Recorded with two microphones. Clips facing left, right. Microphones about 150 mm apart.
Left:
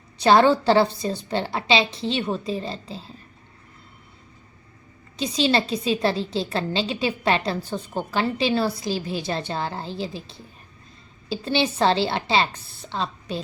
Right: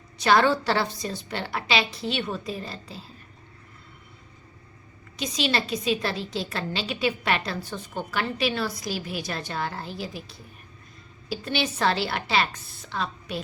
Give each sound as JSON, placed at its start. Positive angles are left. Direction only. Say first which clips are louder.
{"t": 0.2, "sound": "a woman's voice", "louder": "left 4 dB", "side_deg": 30}
{"t": 5.1, "sound": "a woman's voice", "louder": "left 5 dB", "side_deg": 30}